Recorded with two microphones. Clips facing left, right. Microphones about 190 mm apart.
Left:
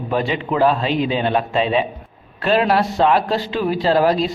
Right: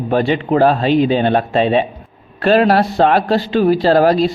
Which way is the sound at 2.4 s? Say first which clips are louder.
Right 5 dB; 55° right (ahead or behind).